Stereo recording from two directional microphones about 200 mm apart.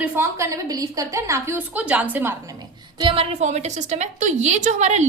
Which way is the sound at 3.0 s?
25° right (ahead or behind).